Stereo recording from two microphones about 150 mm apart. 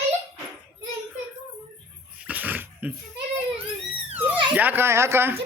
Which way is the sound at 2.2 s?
10° right (ahead or behind).